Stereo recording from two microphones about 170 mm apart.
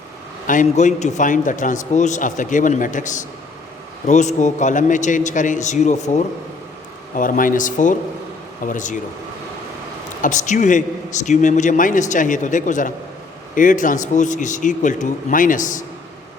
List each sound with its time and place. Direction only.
0.4 s a man's voice: 50° left (ahead or behind)
10.2 s a man's voice: 45° left (ahead or behind)